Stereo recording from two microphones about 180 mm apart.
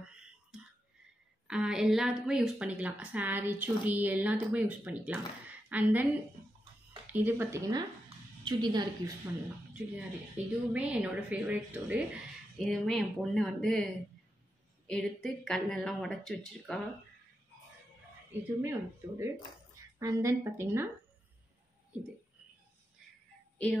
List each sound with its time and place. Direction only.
0.1 s a sound: 5° right (ahead or behind)
1.5 s a woman's voice: 5° right (ahead or behind)
7.1 s a woman's voice: 10° right (ahead or behind)
9.9 s a woman's voice: 10° right (ahead or behind)
12.5 s speech: centre (ahead or behind)
14.9 s speech: 5° left (ahead or behind)
18.6 s a woman's voice: 15° right (ahead or behind)